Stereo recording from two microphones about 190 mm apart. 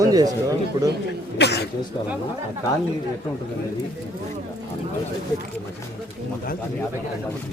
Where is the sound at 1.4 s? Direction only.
65° left (ahead or behind).